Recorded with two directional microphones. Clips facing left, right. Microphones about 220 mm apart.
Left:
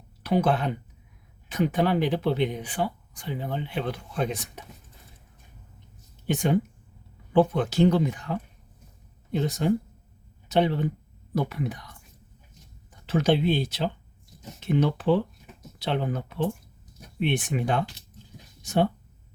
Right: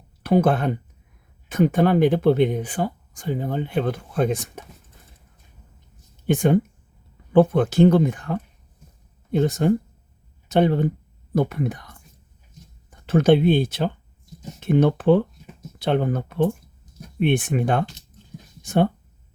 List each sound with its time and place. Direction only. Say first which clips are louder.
0.2 s speech: right 5 dB; 50° right (ahead or behind)
6.2 s speech: right 5 dB; 50° right (ahead or behind)
13.1 s speech: right 6 dB; 50° right (ahead or behind)